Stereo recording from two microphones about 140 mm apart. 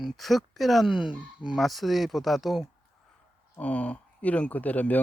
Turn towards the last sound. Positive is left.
turn(degrees=10)  # may be behind; listen again after turning